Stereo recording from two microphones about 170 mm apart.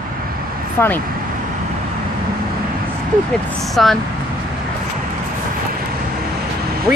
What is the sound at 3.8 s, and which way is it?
Speech, centre (ahead or behind).